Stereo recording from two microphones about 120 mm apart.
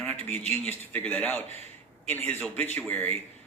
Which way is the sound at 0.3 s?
15° left (ahead or behind).